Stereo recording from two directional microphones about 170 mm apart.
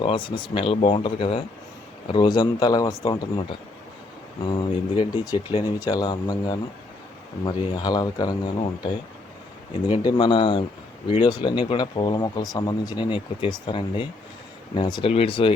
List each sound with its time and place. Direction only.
0.0 s speech: 30° left (ahead or behind)
4.4 s speech: 30° left (ahead or behind)